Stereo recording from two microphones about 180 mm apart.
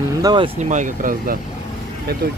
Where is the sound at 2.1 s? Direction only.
60° right (ahead or behind).